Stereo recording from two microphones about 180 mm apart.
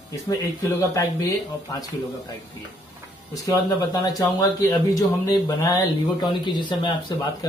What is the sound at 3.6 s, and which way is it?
Speech, 20° left (ahead or behind).